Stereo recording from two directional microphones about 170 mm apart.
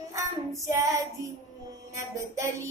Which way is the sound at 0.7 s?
20° right (ahead or behind).